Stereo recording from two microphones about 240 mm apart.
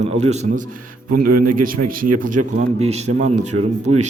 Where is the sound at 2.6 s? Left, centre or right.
Right.